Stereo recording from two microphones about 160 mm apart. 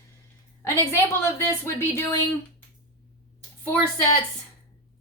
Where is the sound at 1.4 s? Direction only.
15° left (ahead or behind).